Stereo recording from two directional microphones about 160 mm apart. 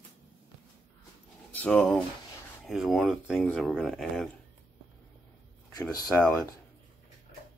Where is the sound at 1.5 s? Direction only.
10° left (ahead or behind).